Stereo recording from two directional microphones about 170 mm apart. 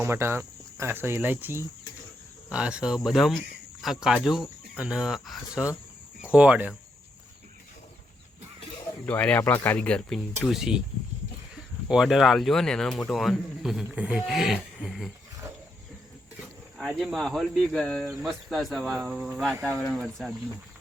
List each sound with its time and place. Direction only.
0.0 s speech: 15° right (ahead or behind)
9.0 s speech: 10° left (ahead or behind)
11.9 s speech: centre (ahead or behind)
16.7 s speech: centre (ahead or behind)